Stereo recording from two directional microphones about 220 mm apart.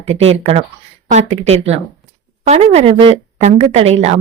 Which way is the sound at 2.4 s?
30° right (ahead or behind).